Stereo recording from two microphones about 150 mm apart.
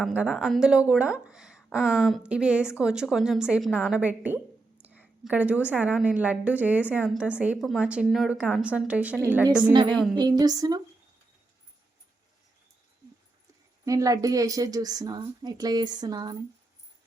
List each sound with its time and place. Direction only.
0.0 s a woman's voice: 5° right (ahead or behind)
10.2 s a woman's voice: 25° right (ahead or behind)
13.8 s a woman's voice: 25° right (ahead or behind)